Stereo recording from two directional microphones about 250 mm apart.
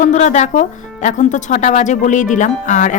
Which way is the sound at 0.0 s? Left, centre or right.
Left.